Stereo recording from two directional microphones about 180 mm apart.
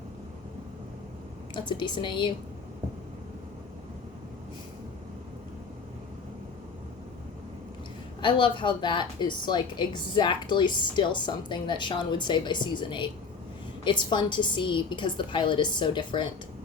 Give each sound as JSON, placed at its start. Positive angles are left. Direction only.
{"t": 1.5, "sound": "a woman's voice", "side_deg": 25}
{"t": 8.2, "sound": "a woman's voice", "side_deg": 25}